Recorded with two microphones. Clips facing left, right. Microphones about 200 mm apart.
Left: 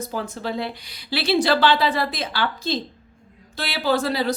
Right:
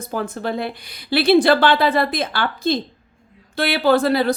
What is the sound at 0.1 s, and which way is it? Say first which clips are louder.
A woman's voice: right 8 dB; 55° right (ahead or behind).